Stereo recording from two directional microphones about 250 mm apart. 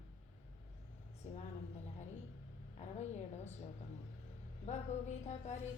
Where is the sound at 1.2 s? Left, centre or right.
Left.